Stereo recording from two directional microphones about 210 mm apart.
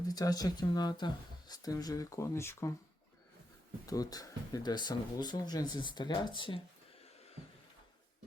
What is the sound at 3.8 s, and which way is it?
Speech, 15° left (ahead or behind).